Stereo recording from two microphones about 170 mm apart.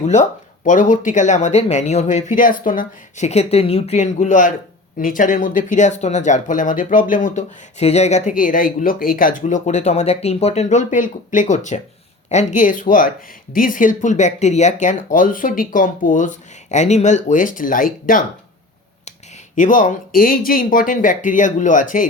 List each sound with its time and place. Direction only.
0.0 s speech: 45° left (ahead or behind)
19.5 s speech: 50° left (ahead or behind)